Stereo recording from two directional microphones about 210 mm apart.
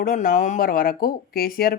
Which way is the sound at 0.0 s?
40° left (ahead or behind).